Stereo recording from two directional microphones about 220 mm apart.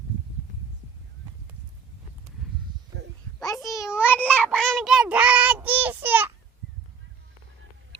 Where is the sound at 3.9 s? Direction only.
10° left (ahead or behind); by 6.3 s 10° right (ahead or behind).